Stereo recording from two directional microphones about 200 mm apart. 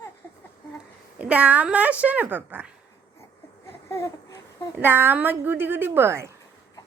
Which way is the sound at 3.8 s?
15° left (ahead or behind).